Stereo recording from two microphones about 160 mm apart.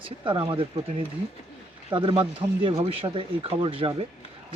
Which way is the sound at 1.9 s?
30° right (ahead or behind).